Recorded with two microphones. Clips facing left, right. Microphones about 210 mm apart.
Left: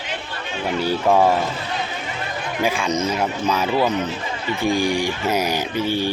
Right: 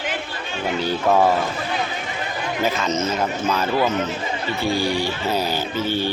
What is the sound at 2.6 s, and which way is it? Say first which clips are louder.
Speech: left 1 dB; 10° left (ahead or behind).